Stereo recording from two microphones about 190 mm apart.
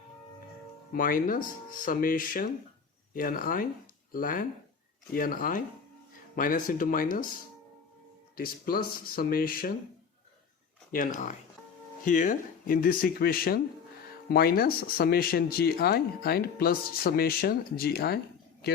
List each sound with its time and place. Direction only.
0.9 s speech: 45° left (ahead or behind)
10.9 s speech: 45° left (ahead or behind)